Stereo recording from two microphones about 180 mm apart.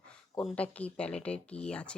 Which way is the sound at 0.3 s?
5° left (ahead or behind).